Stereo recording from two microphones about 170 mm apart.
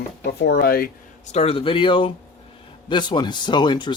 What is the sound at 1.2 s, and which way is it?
Speech, 40° left (ahead or behind).